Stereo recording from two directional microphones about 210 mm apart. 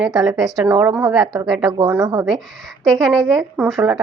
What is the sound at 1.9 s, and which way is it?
Speech, 15° right (ahead or behind).